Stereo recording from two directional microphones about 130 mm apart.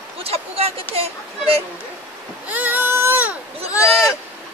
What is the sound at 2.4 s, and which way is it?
Baby cry, 15° right (ahead or behind).